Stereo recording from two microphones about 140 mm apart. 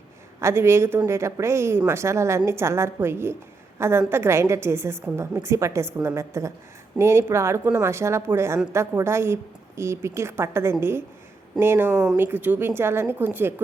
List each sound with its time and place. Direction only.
0.3 s a woman's voice: 20° right (ahead or behind)